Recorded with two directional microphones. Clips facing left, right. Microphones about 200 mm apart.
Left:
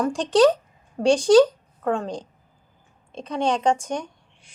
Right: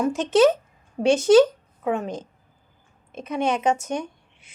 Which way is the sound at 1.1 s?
25° right (ahead or behind).